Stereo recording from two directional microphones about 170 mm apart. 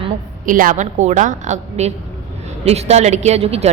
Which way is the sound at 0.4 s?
50° right (ahead or behind).